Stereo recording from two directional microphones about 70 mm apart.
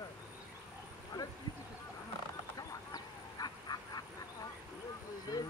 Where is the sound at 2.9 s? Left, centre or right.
Left.